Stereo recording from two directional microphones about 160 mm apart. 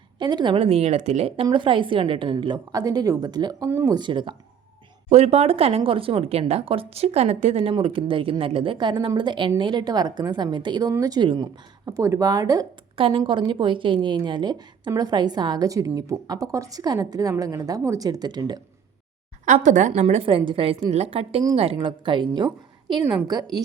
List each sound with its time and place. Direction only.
0.2 s a woman's voice: 25° right (ahead or behind)
3.7 s speech: 15° right (ahead or behind)
3.9 s a woman's voice: 30° right (ahead or behind)
5.0 s a woman's voice: 40° right (ahead or behind); by 12.6 s 25° right (ahead or behind)
13.0 s a woman's voice: 35° right (ahead or behind)
19.5 s a woman's voice: 50° right (ahead or behind); by 23.6 s 25° right (ahead or behind)